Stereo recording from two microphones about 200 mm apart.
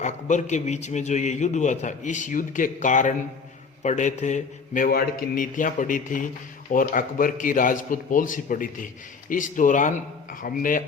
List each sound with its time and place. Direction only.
0.0 s a man's voice: 35° left (ahead or behind)